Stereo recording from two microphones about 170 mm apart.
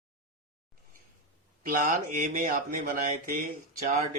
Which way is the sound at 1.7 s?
50° right (ahead or behind).